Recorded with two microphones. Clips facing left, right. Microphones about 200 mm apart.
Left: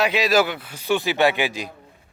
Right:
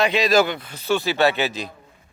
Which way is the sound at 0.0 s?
5° left (ahead or behind).